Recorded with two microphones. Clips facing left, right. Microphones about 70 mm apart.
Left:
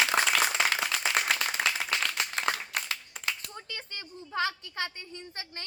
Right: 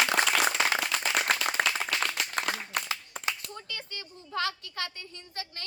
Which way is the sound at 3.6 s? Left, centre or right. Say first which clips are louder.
Right 1 dB; left.